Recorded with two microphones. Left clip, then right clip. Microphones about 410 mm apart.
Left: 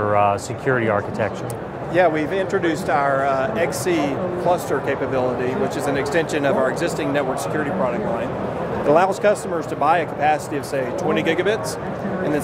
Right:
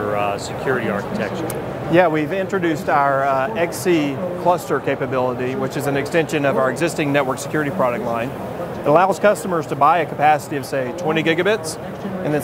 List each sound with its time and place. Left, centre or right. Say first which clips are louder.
0.1 s speech: left 3 dB; left
1.9 s speech: right 2 dB; right
8.8 s speech: right 2 dB; right